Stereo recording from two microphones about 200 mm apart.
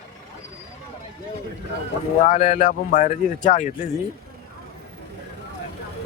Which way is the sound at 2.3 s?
45° left (ahead or behind).